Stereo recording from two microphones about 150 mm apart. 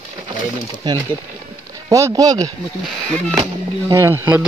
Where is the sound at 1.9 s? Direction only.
20° right (ahead or behind).